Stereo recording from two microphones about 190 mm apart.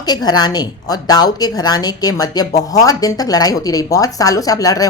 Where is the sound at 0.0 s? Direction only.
20° left (ahead or behind).